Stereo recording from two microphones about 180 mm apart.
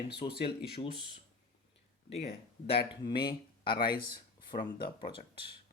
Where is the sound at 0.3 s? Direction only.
65° left (ahead or behind).